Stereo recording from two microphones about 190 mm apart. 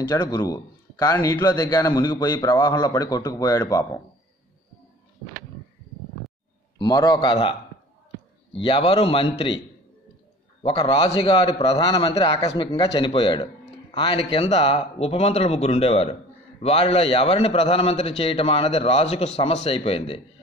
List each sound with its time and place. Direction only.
0.0 s a man's voice: 20° left (ahead or behind)
6.8 s a man's voice: 25° left (ahead or behind)
8.5 s a man's voice: 25° left (ahead or behind)
10.6 s a man's voice: 30° left (ahead or behind)